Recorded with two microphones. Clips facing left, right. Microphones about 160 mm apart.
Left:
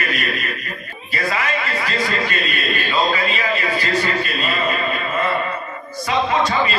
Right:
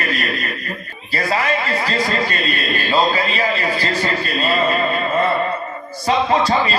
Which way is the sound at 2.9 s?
35° right (ahead or behind).